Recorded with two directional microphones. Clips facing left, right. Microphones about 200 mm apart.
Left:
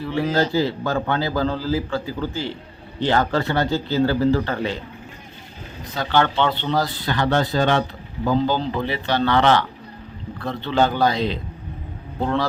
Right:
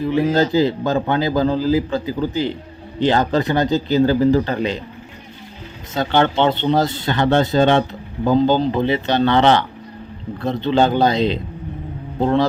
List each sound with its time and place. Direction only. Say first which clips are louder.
0.0 s a man's voice: right 4 dB; 20° right (ahead or behind)
5.9 s speech: right 3 dB; 25° right (ahead or behind)